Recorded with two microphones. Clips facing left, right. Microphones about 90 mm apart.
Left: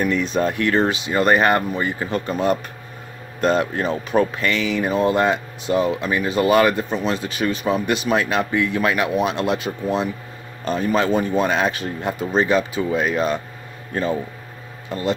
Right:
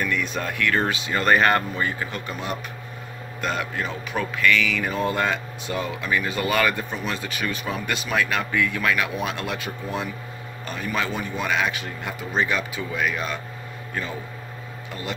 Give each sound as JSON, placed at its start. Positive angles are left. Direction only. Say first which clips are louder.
{"t": 0.0, "sound": "speech", "louder": "left 7 dB", "side_deg": 30}